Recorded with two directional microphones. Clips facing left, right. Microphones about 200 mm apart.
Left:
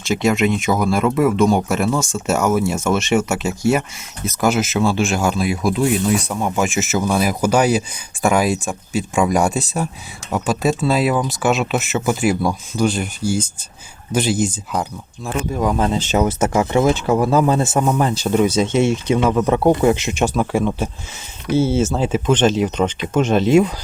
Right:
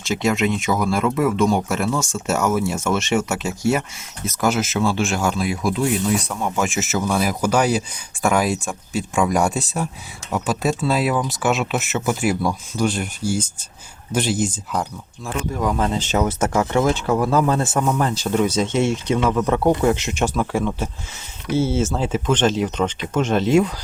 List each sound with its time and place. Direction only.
0.0 s speech: 15° left (ahead or behind)
15.6 s speech: 25° left (ahead or behind)
18.4 s speech: 10° left (ahead or behind)
19.2 s speech: 25° left (ahead or behind)
19.8 s speech: 10° left (ahead or behind)